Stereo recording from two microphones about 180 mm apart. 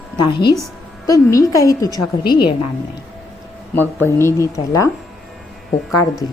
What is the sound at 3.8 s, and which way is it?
Speech, 10° left (ahead or behind).